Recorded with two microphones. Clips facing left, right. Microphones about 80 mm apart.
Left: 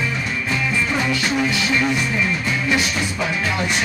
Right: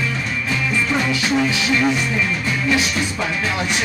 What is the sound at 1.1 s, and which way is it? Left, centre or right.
Music, centre.